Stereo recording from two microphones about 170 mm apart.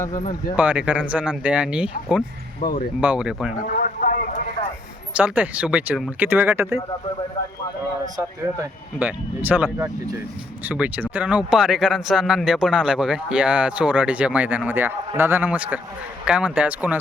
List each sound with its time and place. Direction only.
0.1 s speech: 45° left (ahead or behind)
0.5 s speech: 10° right (ahead or behind)
2.6 s speech: 50° left (ahead or behind)
3.0 s speech: 5° right (ahead or behind)
3.6 s a sound: 55° left (ahead or behind)
5.1 s speech: 10° right (ahead or behind)
8.0 s speech: 20° right (ahead or behind)
9.0 s speech: 10° right (ahead or behind)
10.7 s speech: 10° right (ahead or behind)